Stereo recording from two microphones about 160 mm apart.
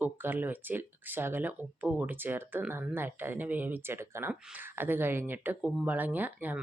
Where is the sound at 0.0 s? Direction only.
10° right (ahead or behind).